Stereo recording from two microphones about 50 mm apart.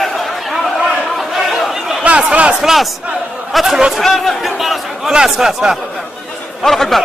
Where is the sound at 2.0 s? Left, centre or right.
Right.